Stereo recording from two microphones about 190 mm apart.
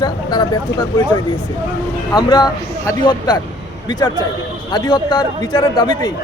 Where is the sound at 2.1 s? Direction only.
20° left (ahead or behind).